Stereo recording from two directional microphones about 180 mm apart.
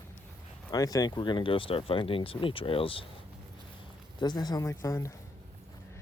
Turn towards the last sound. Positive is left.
turn(degrees=15)  # may be behind; listen again after turning